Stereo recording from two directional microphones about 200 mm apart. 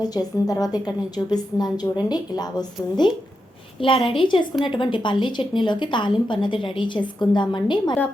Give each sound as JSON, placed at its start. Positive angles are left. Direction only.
{"t": 0.0, "sound": "a woman's voice", "side_deg": 20}